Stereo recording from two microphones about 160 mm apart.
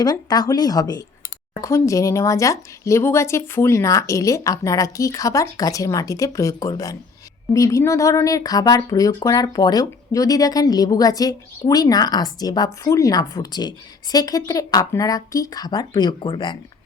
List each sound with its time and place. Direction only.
0.0 s speech: 25° left (ahead or behind)